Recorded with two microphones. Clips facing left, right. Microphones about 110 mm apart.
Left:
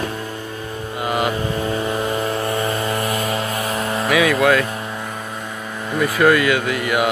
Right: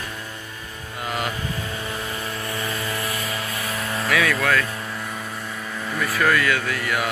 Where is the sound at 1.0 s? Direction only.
60° left (ahead or behind).